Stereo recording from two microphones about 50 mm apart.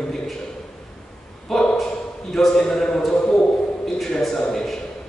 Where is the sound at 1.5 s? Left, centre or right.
Centre.